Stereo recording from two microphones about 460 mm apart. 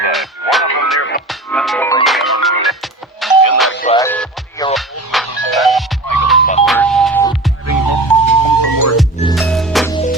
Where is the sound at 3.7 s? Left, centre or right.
Centre.